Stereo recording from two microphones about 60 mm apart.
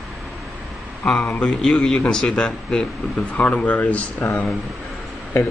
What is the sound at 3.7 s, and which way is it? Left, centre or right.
Speech, left.